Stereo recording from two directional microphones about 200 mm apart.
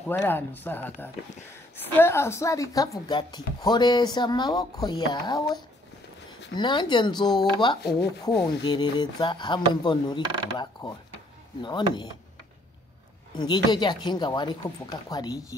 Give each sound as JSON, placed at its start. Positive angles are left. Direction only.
{"t": 0.0, "sound": "speech", "side_deg": 10}
{"t": 7.8, "sound": "rub", "side_deg": 55}
{"t": 8.6, "sound": "speech", "side_deg": 20}
{"t": 13.4, "sound": "speech", "side_deg": 20}